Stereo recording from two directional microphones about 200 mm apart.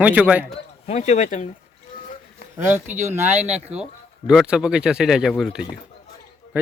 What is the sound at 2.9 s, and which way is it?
Speech, 35° right (ahead or behind).